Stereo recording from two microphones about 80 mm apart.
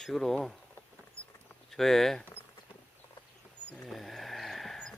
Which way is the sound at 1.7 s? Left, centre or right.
Centre.